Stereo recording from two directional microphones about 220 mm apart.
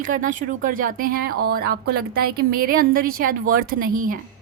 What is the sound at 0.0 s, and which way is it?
A woman's voice, 35° right (ahead or behind).